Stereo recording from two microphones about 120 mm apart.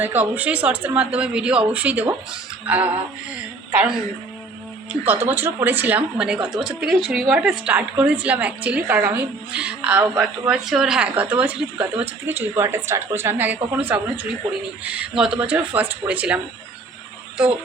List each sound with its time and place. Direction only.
0.0 s a woman's voice: 15° right (ahead or behind)
4.9 s a woman's voice: 20° right (ahead or behind)